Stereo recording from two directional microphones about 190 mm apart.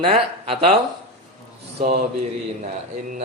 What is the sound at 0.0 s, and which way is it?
Speech, 30° right (ahead or behind).